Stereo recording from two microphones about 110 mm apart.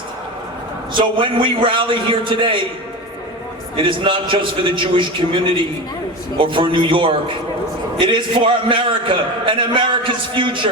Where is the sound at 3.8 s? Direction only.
50° right (ahead or behind).